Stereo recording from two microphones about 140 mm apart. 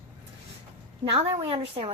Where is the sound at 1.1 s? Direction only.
45° right (ahead or behind).